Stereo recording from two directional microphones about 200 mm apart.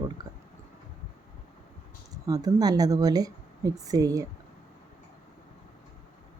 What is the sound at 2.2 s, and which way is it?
Speech, 20° right (ahead or behind).